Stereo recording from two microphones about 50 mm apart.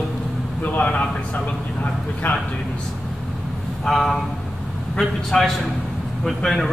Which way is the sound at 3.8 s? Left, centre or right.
Centre.